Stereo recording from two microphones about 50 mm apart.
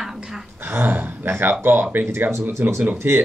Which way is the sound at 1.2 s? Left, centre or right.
Right.